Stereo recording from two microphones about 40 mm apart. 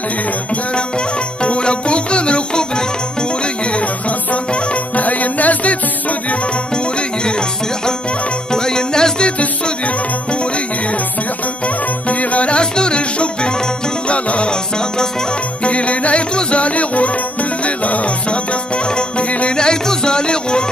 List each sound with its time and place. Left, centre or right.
0.7 s music: left
3.7 s music: left
6.7 s music: left
9.4 s music: left
11.6 s music: left
15.6 s music: left